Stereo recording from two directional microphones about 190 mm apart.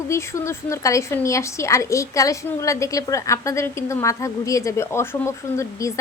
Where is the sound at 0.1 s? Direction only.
15° left (ahead or behind).